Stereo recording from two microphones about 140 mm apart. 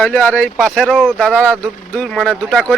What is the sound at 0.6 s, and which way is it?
Speech, centre (ahead or behind).